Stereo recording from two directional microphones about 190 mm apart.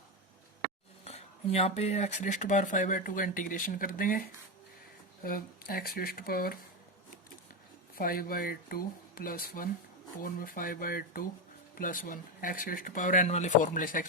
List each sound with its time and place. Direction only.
1.0 s speech: 35° left (ahead or behind)
5.2 s speech: 50° left (ahead or behind)
7.9 s speech: 50° left (ahead or behind)